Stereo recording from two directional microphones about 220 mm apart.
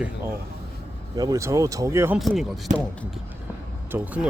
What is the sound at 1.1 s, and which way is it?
Speech, 15° right (ahead or behind).